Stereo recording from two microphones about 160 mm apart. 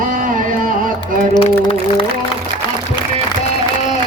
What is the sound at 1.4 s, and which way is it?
Music, 35° left (ahead or behind).